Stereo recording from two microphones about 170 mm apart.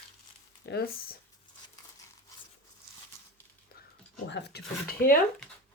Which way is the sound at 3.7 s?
65° left (ahead or behind).